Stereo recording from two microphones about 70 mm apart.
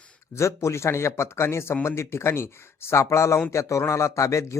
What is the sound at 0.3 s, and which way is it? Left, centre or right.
Speech, left.